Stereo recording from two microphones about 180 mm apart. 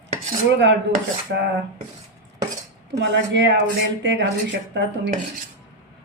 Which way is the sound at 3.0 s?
80° right.